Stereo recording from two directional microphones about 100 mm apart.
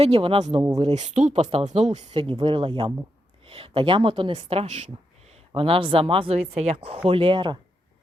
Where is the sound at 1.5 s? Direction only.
65° right (ahead or behind).